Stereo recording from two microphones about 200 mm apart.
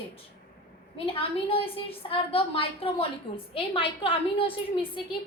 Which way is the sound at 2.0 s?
25° left (ahead or behind).